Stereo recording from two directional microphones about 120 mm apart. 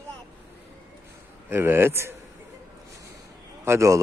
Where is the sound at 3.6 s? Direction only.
25° right (ahead or behind).